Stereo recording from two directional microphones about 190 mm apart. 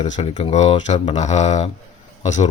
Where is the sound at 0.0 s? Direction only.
35° left (ahead or behind).